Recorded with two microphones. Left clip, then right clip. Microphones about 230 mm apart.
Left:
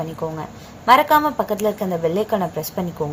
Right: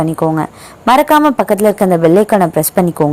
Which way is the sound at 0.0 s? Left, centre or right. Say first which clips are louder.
Right 12 dB; right.